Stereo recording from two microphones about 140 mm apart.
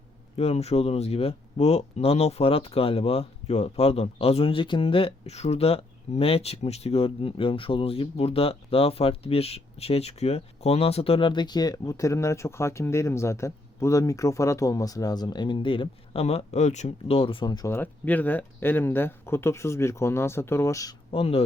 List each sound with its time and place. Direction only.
0.3 s speech: 50° left (ahead or behind)
16.2 s speech: 50° left (ahead or behind); by 17.7 s 30° left (ahead or behind)
17.7 s speech: 10° left (ahead or behind)
21.1 s speech: 45° left (ahead or behind)